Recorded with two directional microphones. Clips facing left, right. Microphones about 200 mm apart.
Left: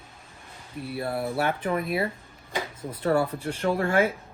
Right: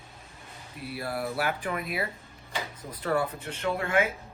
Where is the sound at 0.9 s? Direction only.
25° left (ahead or behind).